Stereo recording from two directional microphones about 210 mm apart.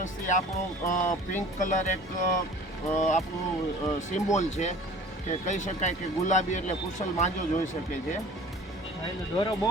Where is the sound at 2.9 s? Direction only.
35° left (ahead or behind).